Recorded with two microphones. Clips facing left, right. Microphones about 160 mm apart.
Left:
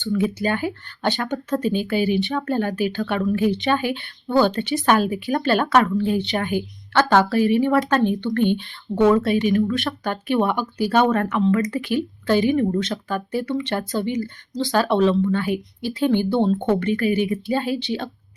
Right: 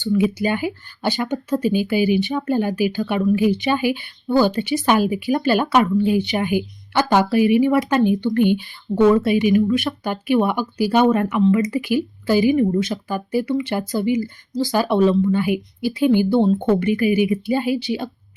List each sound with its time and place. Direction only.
0.1 s speech: 10° right (ahead or behind)